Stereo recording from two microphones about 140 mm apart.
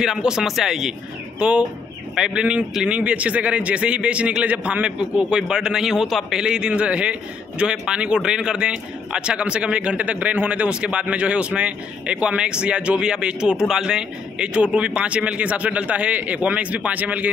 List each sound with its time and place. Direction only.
0.0 s a man's voice: 5° right (ahead or behind)